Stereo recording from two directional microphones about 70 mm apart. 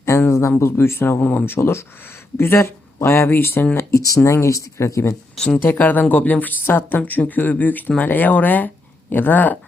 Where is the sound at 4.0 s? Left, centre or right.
Left.